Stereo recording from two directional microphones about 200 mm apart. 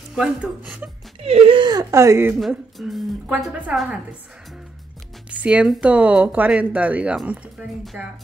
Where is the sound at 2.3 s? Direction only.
Centre (ahead or behind).